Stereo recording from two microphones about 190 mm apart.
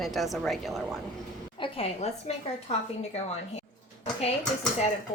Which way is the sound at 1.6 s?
30° left (ahead or behind).